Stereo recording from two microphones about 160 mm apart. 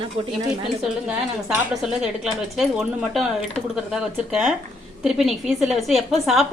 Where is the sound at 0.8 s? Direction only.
5° right (ahead or behind).